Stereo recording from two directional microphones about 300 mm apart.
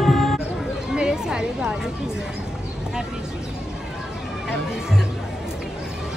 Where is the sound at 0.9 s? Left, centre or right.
Centre.